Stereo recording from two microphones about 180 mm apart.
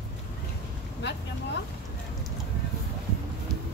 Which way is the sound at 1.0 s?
75° left (ahead or behind).